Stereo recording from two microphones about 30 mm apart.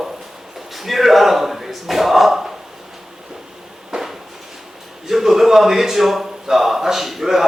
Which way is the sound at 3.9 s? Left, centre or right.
Right.